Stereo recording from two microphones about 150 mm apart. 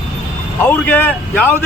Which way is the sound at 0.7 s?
15° left (ahead or behind).